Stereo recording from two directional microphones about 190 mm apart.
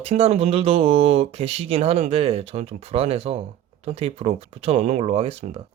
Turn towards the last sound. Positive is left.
turn(degrees=-30)  # may be behind; listen again after turning